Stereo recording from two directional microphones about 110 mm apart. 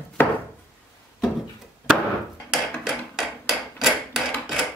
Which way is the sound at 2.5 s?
5° right (ahead or behind).